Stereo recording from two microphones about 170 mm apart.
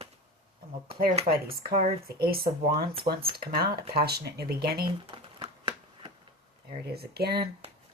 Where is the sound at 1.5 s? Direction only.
60° right (ahead or behind).